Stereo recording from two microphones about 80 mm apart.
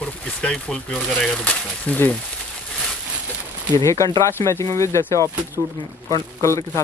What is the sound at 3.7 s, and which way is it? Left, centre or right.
Speech, left.